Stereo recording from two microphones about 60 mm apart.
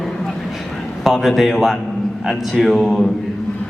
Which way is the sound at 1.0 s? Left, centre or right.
Centre.